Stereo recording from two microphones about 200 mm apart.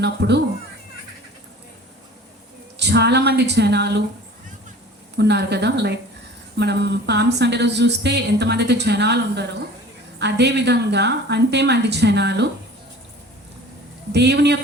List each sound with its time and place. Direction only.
0.0 s speech: 55° right (ahead or behind)
2.7 s speech: 55° right (ahead or behind)
5.1 s speech: 55° right (ahead or behind)
14.1 s speech: 55° right (ahead or behind)